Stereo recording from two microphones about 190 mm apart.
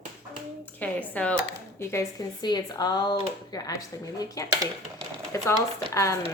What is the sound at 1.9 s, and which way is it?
A woman's voice, 20° left (ahead or behind).